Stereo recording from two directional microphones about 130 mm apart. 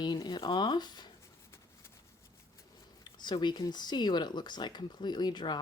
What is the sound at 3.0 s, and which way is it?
Speech, 35° left (ahead or behind).